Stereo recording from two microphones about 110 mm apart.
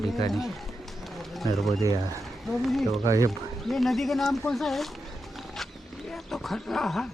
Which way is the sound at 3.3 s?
Centre (ahead or behind).